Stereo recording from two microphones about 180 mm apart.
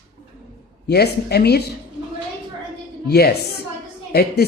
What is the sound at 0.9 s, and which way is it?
Speech, 60° left (ahead or behind).